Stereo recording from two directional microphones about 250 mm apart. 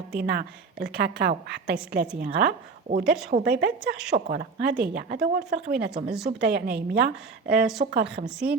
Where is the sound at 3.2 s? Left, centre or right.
Right.